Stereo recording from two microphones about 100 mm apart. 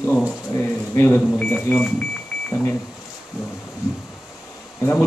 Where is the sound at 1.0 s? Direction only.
20° left (ahead or behind).